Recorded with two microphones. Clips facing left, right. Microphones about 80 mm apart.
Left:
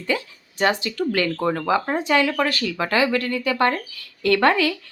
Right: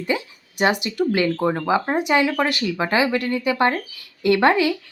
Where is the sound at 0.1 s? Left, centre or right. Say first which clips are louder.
Left 1 dB; centre.